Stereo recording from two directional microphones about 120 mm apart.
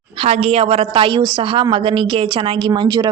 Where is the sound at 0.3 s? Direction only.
55° right (ahead or behind).